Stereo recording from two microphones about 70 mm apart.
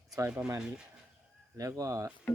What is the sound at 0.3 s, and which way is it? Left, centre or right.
Speech, right.